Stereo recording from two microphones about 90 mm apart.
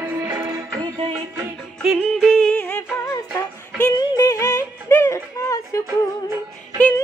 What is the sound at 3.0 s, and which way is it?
Music, 35° left (ahead or behind).